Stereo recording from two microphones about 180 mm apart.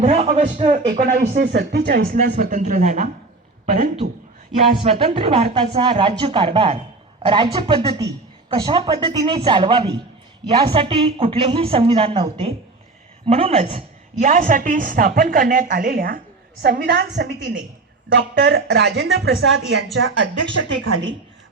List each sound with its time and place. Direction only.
0.0 s a woman's voice: 35° right (ahead or behind)
1.5 s speech: 65° right (ahead or behind)
2.1 s a man's voice: 50° right (ahead or behind); by 13.8 s 35° right (ahead or behind)
14.2 s a woman's voice: 45° right (ahead or behind)
16.6 s a woman's voice: 65° right (ahead or behind); by 20.7 s 90° right